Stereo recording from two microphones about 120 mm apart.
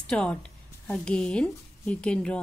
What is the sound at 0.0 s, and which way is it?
A woman's voice, 5° left (ahead or behind).